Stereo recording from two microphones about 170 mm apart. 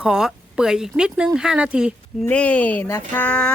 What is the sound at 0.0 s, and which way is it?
Speech, 5° right (ahead or behind).